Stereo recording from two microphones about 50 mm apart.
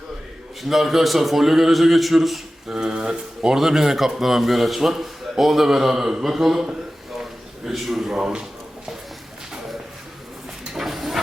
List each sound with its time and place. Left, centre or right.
0.6 s a man's voice: centre
2.6 s a man's voice: centre
10.8 s a sound: centre